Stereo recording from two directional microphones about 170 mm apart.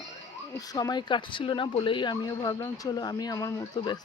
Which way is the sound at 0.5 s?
20° left (ahead or behind).